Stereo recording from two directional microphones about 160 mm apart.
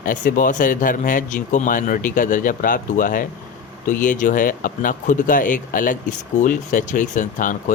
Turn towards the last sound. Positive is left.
turn(degrees=55)  # may be behind; listen again after turning